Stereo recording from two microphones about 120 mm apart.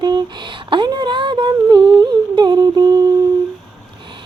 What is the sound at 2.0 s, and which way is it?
Humming, 40° right (ahead or behind).